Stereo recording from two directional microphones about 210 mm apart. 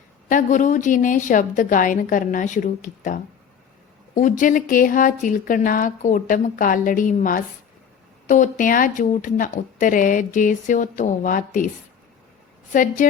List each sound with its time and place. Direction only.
0.3 s speech: 35° left (ahead or behind)
12.7 s speech: 40° left (ahead or behind)